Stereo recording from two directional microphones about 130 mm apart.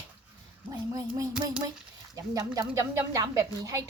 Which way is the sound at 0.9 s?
25° right (ahead or behind).